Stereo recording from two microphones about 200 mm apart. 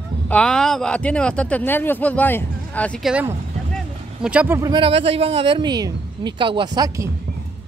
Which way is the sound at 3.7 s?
5° right (ahead or behind).